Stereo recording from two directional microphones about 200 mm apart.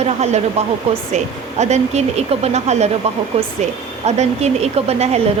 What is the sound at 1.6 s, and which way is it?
A woman's voice, 35° right (ahead or behind).